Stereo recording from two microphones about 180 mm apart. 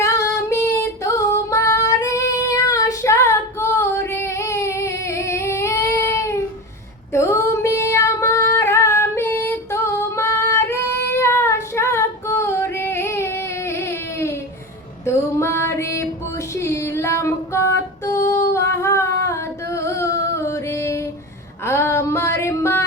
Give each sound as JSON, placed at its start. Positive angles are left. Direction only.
{"t": 0.0, "sound": "female singing", "side_deg": 15}
{"t": 21.6, "sound": "music", "side_deg": 15}